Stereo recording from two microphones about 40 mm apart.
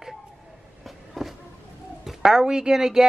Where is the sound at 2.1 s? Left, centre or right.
Centre.